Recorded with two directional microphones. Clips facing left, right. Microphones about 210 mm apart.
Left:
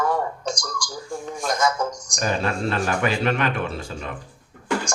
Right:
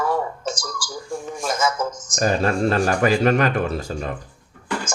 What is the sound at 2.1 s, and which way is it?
Speech, 40° right (ahead or behind).